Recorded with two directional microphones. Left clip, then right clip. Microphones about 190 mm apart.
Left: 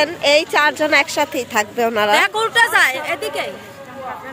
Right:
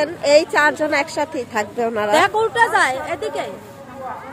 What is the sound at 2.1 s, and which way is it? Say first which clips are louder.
A woman's voice: left 1 dB; 30° right (ahead or behind).